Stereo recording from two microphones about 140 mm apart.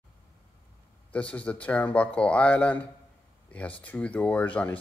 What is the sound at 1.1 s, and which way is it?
Speech, 10° left (ahead or behind).